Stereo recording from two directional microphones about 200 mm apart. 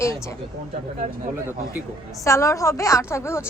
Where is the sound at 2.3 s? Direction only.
15° left (ahead or behind).